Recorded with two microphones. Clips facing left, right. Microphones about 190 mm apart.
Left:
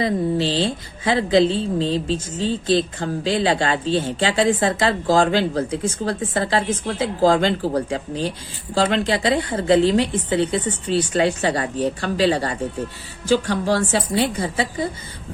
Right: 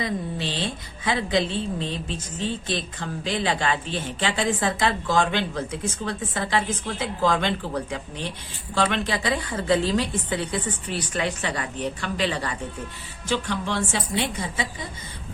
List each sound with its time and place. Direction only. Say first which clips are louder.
0.0 s a woman's voice: left 8 dB; 30° left (ahead or behind)